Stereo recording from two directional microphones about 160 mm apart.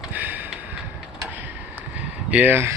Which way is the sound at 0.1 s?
10° right (ahead or behind).